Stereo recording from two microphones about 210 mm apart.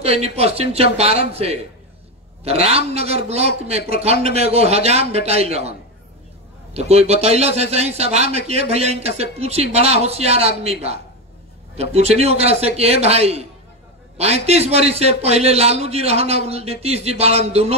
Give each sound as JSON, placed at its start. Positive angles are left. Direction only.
{"t": 0.0, "sound": "a man's voice", "side_deg": -30}